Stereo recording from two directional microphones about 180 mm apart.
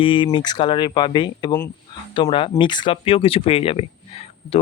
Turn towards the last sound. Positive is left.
turn(degrees=30)  # may be behind; listen again after turning